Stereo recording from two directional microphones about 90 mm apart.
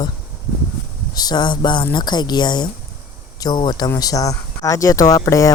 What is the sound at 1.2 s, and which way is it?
Speech, 50° left (ahead or behind).